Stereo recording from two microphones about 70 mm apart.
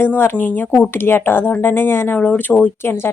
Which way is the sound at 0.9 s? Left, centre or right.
Left.